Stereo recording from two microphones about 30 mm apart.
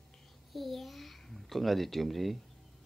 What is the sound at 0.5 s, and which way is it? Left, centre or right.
Babbling, centre.